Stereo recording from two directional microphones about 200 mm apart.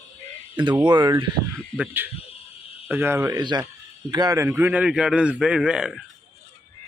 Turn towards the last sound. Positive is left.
turn(degrees=-5)  # may be behind; listen again after turning